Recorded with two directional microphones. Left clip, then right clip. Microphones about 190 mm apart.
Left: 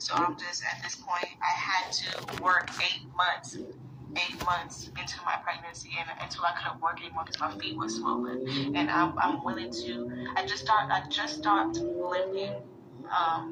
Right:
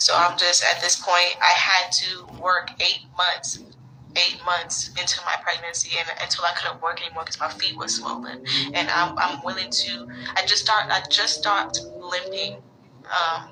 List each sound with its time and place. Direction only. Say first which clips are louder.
0.0 s a woman's voice: right 11 dB; 70° right (ahead or behind); by 2.1 s 35° right (ahead or behind)
2.4 s speech: right 5 dB; 20° right (ahead or behind)
4.1 s a woman's voice: right 8 dB; 35° right (ahead or behind)